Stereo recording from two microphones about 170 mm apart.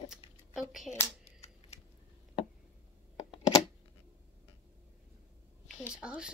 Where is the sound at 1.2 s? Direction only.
40° left (ahead or behind).